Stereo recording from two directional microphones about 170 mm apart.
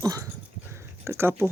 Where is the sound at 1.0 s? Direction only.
15° right (ahead or behind).